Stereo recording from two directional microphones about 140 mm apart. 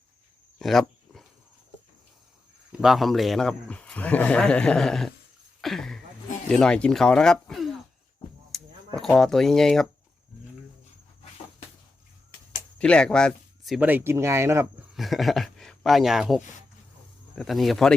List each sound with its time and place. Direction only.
0.6 s dog: centre (ahead or behind)
2.7 s speech: centre (ahead or behind)
8.5 s a sound: centre (ahead or behind)
9.0 s speech: 5° left (ahead or behind)
12.8 s speech: 5° left (ahead or behind)
13.7 s speech: 15° right (ahead or behind)
14.9 s speech: centre (ahead or behind)